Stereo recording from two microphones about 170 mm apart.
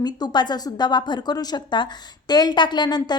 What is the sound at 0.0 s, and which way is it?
Speech, 25° left (ahead or behind).